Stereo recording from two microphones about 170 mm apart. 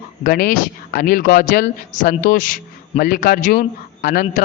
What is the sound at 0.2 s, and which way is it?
A man's voice, 55° left (ahead or behind).